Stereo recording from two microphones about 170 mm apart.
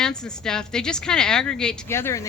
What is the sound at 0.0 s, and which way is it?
A woman's voice, 5° left (ahead or behind).